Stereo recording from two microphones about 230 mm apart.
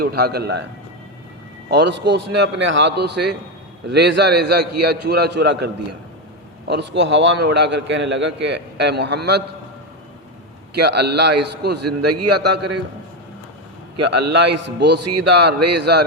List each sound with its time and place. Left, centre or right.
0.0 s a man's voice: right
1.7 s a man's voice: right
10.8 s a man's voice: right
11.8 s speech: right
14.1 s a man's voice: right
15.0 s speech: right
15.7 s a man's voice: right